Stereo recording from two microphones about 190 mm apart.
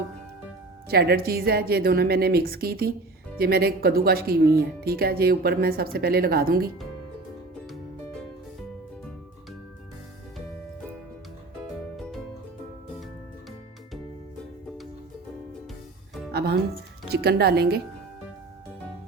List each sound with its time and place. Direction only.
0.9 s speech: 55° right (ahead or behind)
16.3 s music: 60° right (ahead or behind)
17.1 s speech: 60° right (ahead or behind)